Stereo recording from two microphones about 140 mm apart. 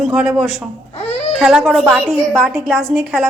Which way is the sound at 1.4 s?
5° right (ahead or behind).